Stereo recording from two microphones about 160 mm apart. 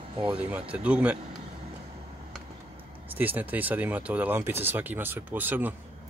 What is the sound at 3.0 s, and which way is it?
Speech, 10° right (ahead or behind).